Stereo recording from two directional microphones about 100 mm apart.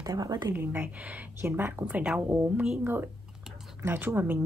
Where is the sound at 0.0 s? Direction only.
35° right (ahead or behind).